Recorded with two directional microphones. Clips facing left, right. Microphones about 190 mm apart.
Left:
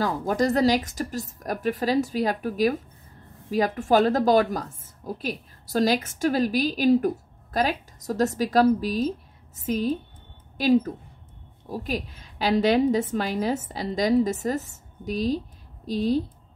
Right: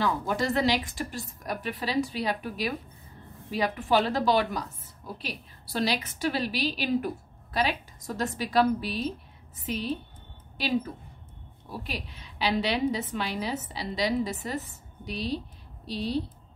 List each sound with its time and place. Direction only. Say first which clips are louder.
0.0 s a woman's voice: left 4 dB; 40° left (ahead or behind)